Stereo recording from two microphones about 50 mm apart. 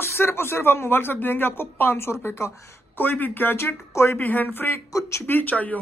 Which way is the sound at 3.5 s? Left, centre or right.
Left.